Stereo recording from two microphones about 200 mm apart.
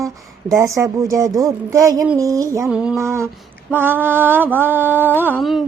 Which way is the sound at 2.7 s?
5° right (ahead or behind).